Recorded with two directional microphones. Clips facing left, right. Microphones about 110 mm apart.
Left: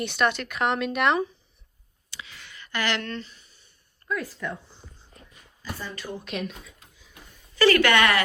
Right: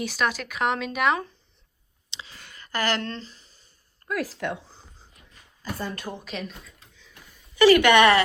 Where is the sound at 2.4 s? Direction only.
40° right (ahead or behind).